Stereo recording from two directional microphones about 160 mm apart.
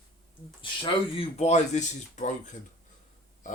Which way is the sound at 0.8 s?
40° left (ahead or behind).